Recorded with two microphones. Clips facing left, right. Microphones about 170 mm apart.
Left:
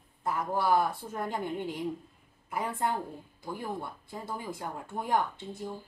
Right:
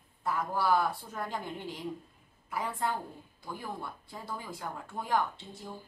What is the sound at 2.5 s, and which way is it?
Speech, 20° left (ahead or behind).